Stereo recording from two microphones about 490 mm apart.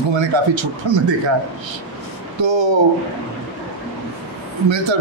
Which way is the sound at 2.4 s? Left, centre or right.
Right.